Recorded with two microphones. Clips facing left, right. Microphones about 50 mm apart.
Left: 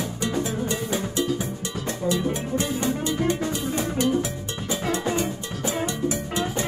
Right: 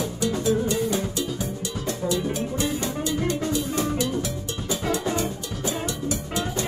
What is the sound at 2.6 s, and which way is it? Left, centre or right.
Music, left.